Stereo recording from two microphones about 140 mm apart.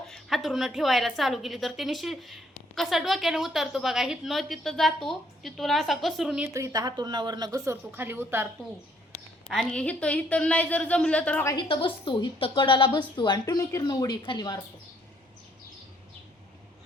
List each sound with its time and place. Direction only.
0.1 s a woman's voice: centre (ahead or behind)
6.5 s speech: 25° right (ahead or behind)
9.5 s a woman's voice: 5° left (ahead or behind)
11.5 s a woman's voice: 40° left (ahead or behind)